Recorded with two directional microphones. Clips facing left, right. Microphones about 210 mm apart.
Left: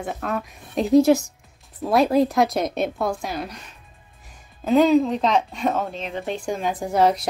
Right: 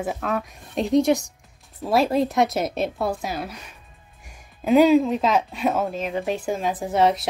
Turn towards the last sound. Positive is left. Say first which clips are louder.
# left 1 dB
turn(degrees=0)  # may be behind; listen again after turning